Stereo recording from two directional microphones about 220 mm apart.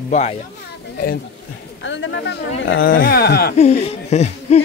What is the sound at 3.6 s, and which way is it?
Speech, 30° left (ahead or behind).